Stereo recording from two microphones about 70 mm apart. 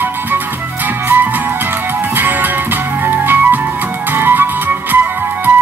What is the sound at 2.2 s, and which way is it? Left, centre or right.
Music, right.